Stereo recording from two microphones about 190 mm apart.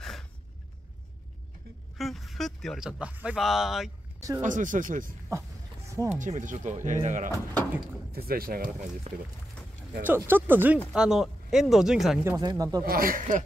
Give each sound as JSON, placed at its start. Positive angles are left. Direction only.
{"t": 2.0, "sound": "speech", "side_deg": 0}
{"t": 4.4, "sound": "speech", "side_deg": -40}
{"t": 5.9, "sound": "a sound", "side_deg": -15}
{"t": 6.1, "sound": "speech", "side_deg": -40}
{"t": 8.3, "sound": "speech", "side_deg": -50}
{"t": 9.1, "sound": "speech", "side_deg": -35}
{"t": 10.0, "sound": "speech", "side_deg": -10}
{"t": 12.3, "sound": "speech", "side_deg": -20}
{"t": 12.8, "sound": "speech", "side_deg": -50}